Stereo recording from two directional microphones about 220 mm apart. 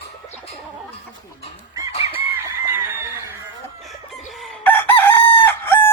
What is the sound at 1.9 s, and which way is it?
Chicken, 25° left (ahead or behind).